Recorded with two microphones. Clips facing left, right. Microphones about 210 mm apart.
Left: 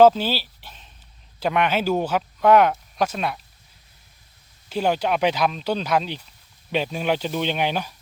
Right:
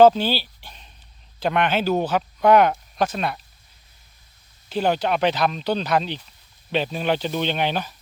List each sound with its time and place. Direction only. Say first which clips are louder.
0.0 s a sound: right 1 dB; 5° left (ahead or behind)
1.4 s speech: even; 10° left (ahead or behind)
4.7 s speech: even; 5° left (ahead or behind)